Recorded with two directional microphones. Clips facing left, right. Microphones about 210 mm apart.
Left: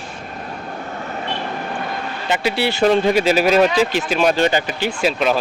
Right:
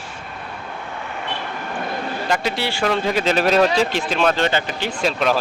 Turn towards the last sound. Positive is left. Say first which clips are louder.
# left 2 dB
turn(degrees=5)  # may be behind; listen again after turning